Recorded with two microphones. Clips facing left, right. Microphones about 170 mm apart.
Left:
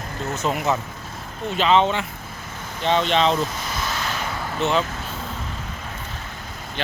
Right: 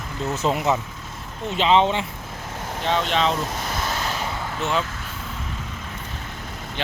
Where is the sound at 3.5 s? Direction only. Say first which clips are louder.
Right 1 dB; 55° right (ahead or behind).